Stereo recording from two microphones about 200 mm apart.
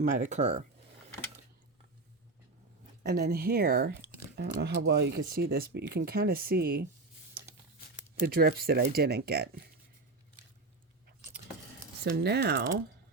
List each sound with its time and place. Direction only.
0.0 s speech: 40° right (ahead or behind)
3.0 s speech: 50° right (ahead or behind)
8.2 s speech: 50° right (ahead or behind)
12.0 s speech: 55° right (ahead or behind)